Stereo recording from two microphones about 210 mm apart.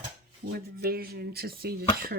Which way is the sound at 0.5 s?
45° right (ahead or behind).